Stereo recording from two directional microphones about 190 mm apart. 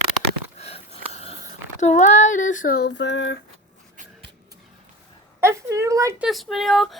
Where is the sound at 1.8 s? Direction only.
40° left (ahead or behind); by 3.4 s 70° left (ahead or behind).